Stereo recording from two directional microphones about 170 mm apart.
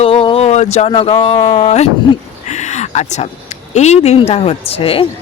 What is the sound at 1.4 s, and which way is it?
Speech, 35° left (ahead or behind).